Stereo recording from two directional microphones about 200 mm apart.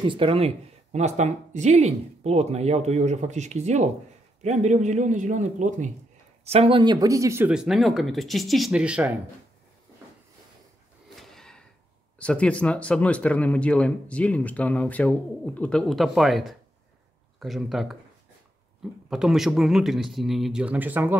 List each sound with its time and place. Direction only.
0.0 s speech: 25° right (ahead or behind); by 9.1 s 5° right (ahead or behind)
11.1 s gasp: centre (ahead or behind)
12.2 s speech: 5° left (ahead or behind)
19.0 s speech: centre (ahead or behind)